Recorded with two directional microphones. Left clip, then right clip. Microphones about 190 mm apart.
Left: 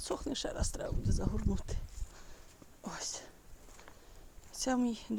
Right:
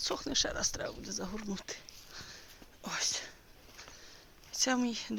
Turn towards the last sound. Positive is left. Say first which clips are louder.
# right 1 dB
turn(degrees=20)  # may be behind; listen again after turning